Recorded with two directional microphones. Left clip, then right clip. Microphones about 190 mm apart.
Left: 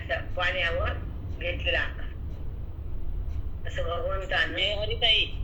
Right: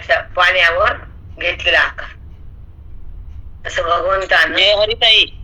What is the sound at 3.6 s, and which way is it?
A man's voice, 50° right (ahead or behind).